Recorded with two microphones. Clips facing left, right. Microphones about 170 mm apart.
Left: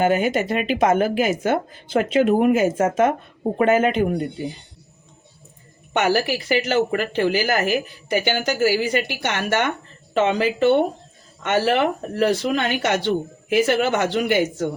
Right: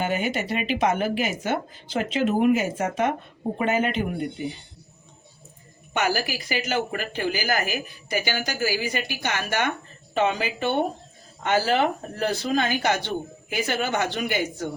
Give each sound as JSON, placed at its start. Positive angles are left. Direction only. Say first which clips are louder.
{"t": 0.0, "sound": "speech", "louder": "left 7 dB", "side_deg": 45}
{"t": 6.0, "sound": "speech", "louder": "left 5 dB", "side_deg": 65}